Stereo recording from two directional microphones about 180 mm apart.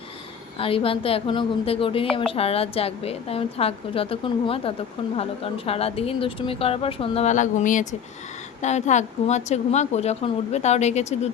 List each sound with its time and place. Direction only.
0.6 s speech: 30° left (ahead or behind)